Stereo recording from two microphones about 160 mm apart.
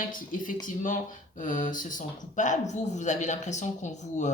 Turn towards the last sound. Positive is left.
turn(degrees=50)  # may be behind; listen again after turning